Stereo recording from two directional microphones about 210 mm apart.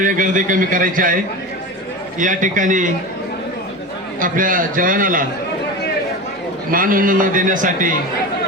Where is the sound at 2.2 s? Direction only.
40° right (ahead or behind).